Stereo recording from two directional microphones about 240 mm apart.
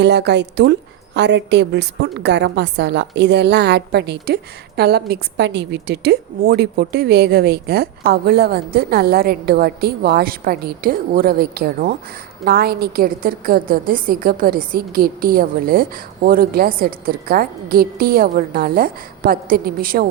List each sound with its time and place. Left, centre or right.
0.0 s a woman's voice: right